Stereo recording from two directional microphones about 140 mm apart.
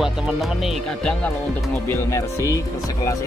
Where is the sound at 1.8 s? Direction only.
20° left (ahead or behind).